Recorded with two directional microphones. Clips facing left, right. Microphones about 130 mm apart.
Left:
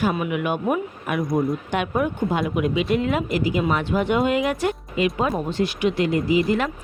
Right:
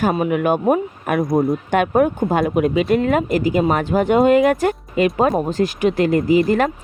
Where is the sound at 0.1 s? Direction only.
40° right (ahead or behind).